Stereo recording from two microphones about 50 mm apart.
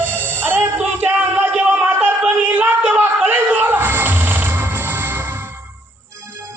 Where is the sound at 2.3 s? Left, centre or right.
Right.